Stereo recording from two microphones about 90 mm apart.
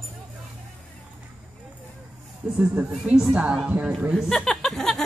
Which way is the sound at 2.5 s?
15° right (ahead or behind).